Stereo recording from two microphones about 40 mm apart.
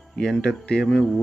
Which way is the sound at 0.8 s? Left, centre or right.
Centre.